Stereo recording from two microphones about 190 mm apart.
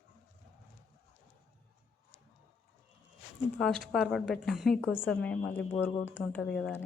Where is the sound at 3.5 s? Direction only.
5° left (ahead or behind).